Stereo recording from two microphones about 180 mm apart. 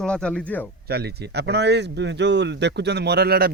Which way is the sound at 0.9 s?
65° right (ahead or behind).